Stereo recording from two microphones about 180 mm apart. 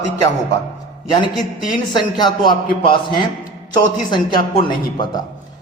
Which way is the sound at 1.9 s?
25° left (ahead or behind).